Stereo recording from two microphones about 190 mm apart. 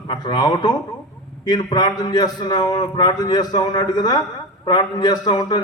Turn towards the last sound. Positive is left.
turn(degrees=20)  # may be behind; listen again after turning